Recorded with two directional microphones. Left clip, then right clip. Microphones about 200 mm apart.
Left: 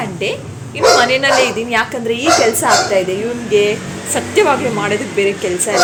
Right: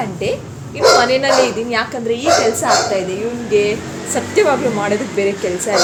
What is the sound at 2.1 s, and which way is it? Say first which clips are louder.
Speech: left 1 dB; 30° left (ahead or behind).